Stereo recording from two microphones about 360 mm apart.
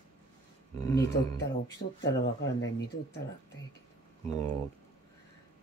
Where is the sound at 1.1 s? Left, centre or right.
Left.